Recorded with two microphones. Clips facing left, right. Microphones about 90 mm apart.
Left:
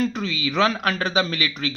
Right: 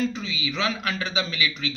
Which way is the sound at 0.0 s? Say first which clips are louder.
Left 3 dB; 55° left (ahead or behind).